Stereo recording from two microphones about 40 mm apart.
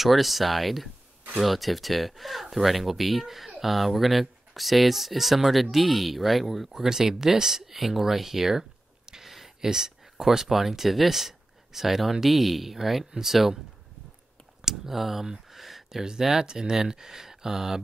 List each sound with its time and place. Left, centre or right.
0.0 s speech: centre
14.6 s speech: centre
15.5 s a sound: centre
16.0 s speech: centre